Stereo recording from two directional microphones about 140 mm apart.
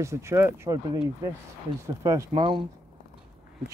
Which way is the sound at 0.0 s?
20° right (ahead or behind).